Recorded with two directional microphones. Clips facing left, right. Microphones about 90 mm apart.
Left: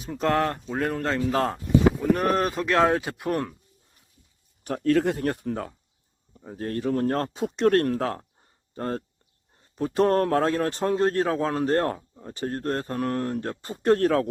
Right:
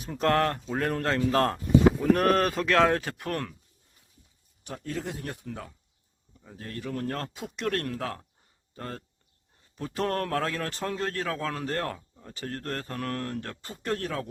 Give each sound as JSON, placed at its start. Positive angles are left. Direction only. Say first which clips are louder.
{"t": 0.0, "sound": "speech", "louder": "left 1 dB", "side_deg": 5}
{"t": 4.6, "sound": "speech", "louder": "left 13 dB", "side_deg": 60}
{"t": 9.7, "sound": "a man's voice", "louder": "left 8 dB", "side_deg": 25}